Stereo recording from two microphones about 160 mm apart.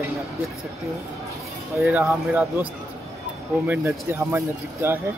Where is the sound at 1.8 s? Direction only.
15° right (ahead or behind).